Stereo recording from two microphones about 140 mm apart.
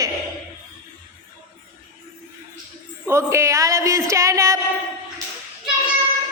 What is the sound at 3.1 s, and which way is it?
Speech, 20° right (ahead or behind).